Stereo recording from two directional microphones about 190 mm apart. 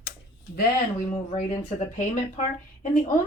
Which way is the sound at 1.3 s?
40° left (ahead or behind).